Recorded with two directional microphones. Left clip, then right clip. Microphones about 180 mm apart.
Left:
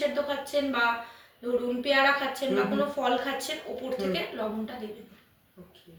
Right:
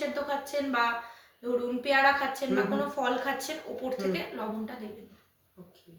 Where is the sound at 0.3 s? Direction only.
15° right (ahead or behind).